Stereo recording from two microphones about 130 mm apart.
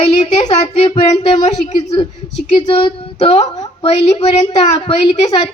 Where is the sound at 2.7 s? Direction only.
45° left (ahead or behind).